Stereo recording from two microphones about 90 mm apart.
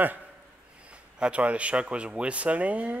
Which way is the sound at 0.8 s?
15° right (ahead or behind).